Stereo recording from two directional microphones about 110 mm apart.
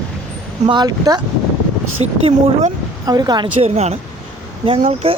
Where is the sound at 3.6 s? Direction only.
85° right.